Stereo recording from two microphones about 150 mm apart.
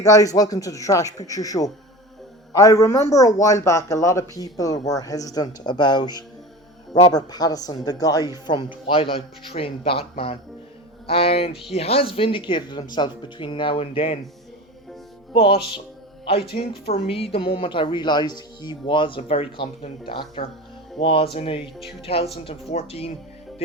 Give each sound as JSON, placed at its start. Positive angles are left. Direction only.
{"t": 0.0, "sound": "speech", "side_deg": 25}
{"t": 16.6, "sound": "speech", "side_deg": 40}